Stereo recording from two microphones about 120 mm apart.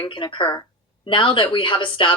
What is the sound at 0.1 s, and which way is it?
Speech, 45° left (ahead or behind).